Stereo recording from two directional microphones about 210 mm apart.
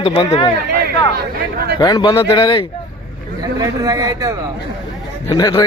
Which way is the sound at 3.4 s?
15° right (ahead or behind).